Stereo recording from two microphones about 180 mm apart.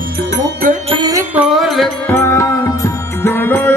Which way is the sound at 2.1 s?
15° left (ahead or behind).